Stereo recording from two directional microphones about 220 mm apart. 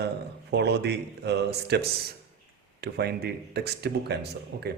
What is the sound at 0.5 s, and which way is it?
Speech, 50° right (ahead or behind).